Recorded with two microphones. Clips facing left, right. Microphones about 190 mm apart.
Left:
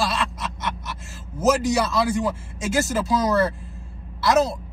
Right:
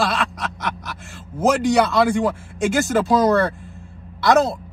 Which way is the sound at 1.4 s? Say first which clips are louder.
Right 3 dB; 60° right (ahead or behind).